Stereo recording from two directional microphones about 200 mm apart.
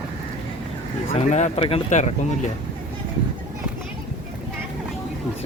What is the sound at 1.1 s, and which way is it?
Speech, 35° left (ahead or behind).